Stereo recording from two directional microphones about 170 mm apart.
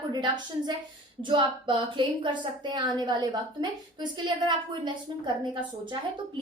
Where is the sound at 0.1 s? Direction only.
25° right (ahead or behind).